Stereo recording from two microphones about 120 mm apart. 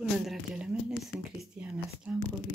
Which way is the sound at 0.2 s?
5° right (ahead or behind).